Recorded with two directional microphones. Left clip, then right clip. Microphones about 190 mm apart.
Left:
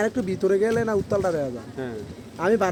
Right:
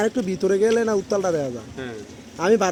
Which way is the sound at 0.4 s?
50° right (ahead or behind).